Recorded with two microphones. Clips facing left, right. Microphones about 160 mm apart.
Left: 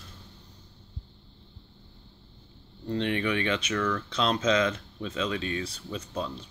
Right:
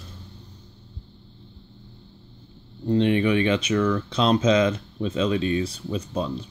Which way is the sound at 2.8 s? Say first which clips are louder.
Right 8 dB; 20° right (ahead or behind).